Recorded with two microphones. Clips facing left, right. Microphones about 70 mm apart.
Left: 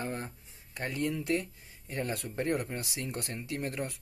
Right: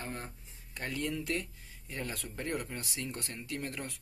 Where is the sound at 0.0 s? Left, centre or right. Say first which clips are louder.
Left 5 dB; centre.